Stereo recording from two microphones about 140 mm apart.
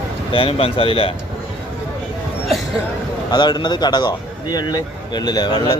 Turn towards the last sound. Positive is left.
turn(degrees=30)  # may be behind; listen again after turning